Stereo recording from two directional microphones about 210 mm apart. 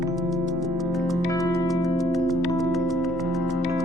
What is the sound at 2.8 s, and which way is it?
Music, centre (ahead or behind).